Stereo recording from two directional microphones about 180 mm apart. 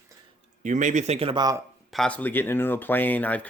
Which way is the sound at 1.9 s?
5° left (ahead or behind).